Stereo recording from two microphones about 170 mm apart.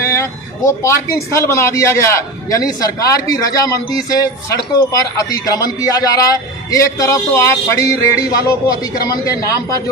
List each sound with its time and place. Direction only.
0.1 s speech: 15° left (ahead or behind)